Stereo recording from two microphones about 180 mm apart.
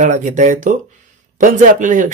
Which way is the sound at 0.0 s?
45° right (ahead or behind).